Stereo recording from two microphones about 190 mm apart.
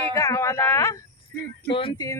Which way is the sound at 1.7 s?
30° left (ahead or behind).